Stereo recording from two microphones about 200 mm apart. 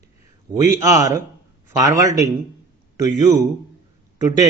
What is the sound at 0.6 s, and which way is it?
A man's voice, 15° right (ahead or behind).